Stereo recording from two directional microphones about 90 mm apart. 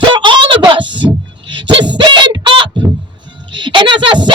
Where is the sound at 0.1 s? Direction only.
60° right (ahead or behind).